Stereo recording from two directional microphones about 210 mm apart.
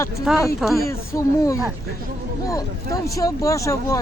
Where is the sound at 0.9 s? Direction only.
15° left (ahead or behind).